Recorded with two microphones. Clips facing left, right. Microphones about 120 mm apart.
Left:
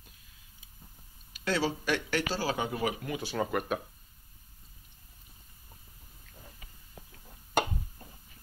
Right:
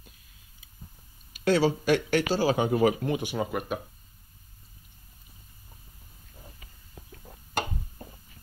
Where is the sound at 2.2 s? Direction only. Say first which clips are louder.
Right 7 dB; 15° right (ahead or behind).